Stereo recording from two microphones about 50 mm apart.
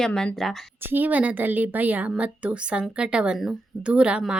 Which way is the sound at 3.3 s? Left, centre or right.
Centre.